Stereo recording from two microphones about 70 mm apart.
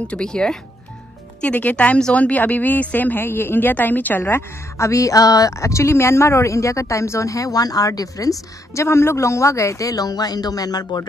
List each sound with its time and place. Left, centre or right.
0.1 s speech: centre
1.4 s speech: left
8.8 s a man's voice: left